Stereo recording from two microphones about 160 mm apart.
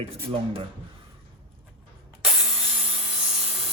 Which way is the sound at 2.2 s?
Centre (ahead or behind).